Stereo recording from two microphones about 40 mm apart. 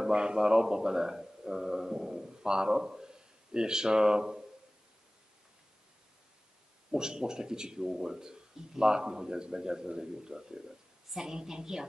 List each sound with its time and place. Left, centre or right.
0.0 s speech: right
6.9 s speech: centre